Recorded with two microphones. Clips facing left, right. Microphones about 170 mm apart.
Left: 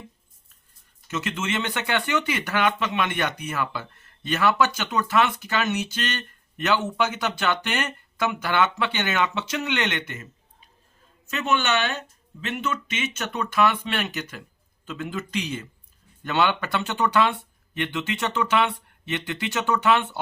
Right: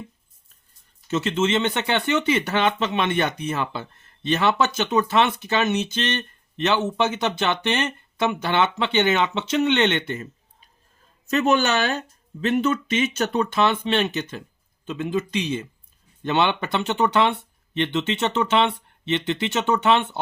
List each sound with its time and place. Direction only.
1.0 s speech: 30° right (ahead or behind)
11.3 s speech: 40° right (ahead or behind); by 20.1 s 25° right (ahead or behind)